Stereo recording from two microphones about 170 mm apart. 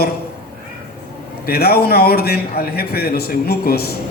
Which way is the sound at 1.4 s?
65° left (ahead or behind).